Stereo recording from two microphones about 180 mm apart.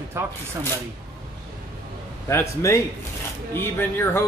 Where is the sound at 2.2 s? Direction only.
15° left (ahead or behind).